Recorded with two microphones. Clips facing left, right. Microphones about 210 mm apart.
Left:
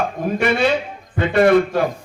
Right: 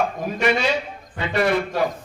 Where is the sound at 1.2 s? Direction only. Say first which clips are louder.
Left 7 dB; 50° left (ahead or behind).